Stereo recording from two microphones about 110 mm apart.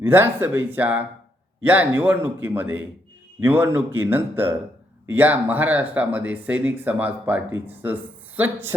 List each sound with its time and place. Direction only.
0.0 s speech: 20° right (ahead or behind)